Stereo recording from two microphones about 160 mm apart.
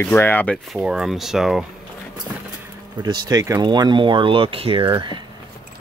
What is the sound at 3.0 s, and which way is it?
Speech, 25° right (ahead or behind).